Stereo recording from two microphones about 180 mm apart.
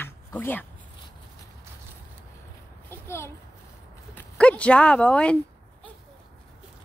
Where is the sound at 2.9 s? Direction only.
15° left (ahead or behind).